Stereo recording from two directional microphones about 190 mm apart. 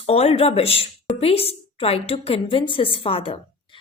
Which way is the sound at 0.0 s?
30° left (ahead or behind).